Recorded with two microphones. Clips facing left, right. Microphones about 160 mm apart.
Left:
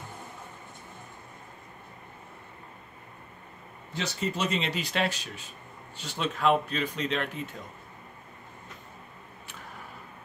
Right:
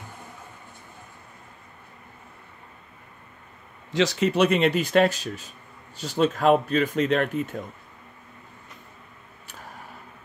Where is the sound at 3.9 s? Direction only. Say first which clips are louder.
Right 10 dB; 90° right; by 7.6 s 50° right (ahead or behind).